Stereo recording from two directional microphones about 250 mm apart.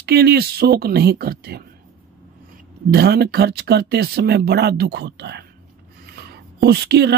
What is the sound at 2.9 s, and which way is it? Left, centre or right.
Speech, right.